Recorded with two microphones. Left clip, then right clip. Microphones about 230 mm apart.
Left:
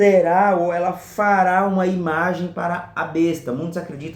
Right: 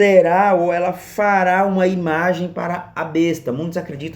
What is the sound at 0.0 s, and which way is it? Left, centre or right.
Speech, right.